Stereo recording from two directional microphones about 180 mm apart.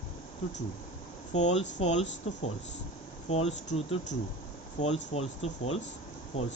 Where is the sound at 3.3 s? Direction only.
40° left (ahead or behind).